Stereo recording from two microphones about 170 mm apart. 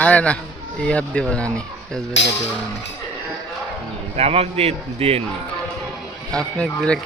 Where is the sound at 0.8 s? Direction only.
5° left (ahead or behind).